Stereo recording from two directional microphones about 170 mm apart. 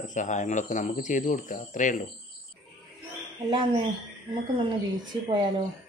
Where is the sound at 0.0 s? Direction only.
45° left (ahead or behind).